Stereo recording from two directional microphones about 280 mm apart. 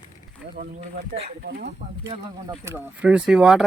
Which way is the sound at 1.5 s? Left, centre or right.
Right.